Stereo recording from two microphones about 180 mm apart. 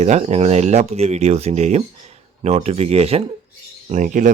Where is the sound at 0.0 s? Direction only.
35° right (ahead or behind).